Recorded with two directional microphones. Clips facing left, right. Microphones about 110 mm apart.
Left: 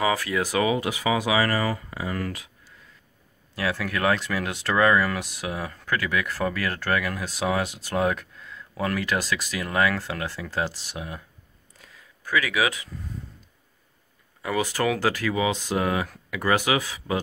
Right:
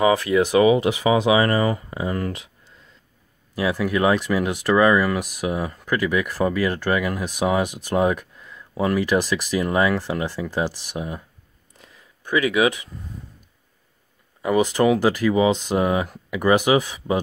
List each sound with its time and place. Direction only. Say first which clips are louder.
0.0 s speech: right 7 dB; 20° right (ahead or behind)
11.8 s a sound: right 1 dB; 20° right (ahead or behind)
14.4 s speech: right 7 dB; 20° right (ahead or behind)